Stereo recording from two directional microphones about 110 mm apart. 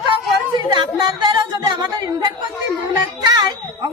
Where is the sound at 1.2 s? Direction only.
45° right (ahead or behind).